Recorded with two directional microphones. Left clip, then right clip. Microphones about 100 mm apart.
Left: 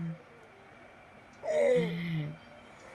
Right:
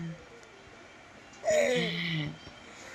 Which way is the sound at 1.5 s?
40° left (ahead or behind).